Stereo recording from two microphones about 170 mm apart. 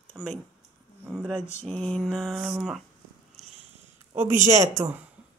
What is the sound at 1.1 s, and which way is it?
Mantra, centre (ahead or behind).